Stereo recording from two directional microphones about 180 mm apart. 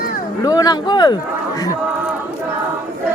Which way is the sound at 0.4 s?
20° left (ahead or behind).